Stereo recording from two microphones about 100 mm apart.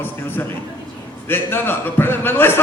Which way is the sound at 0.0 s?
20° left (ahead or behind).